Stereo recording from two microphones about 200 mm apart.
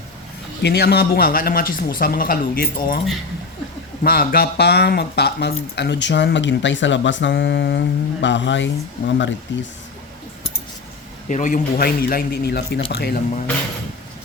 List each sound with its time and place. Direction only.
0.6 s speech: 55° left (ahead or behind)
4.0 s speech: 50° left (ahead or behind)
11.3 s speech: 40° left (ahead or behind)